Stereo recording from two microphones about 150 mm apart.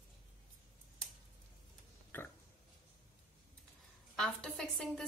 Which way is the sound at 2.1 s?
15° left (ahead or behind).